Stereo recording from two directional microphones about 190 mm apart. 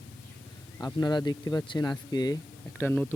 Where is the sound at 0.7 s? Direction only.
15° left (ahead or behind).